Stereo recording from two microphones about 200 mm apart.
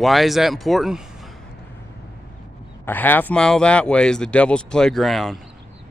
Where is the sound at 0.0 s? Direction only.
Centre (ahead or behind).